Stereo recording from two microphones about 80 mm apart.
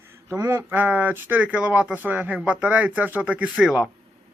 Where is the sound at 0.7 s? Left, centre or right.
Right.